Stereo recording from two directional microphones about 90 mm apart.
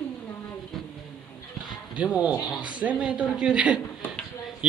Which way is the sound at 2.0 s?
15° right (ahead or behind).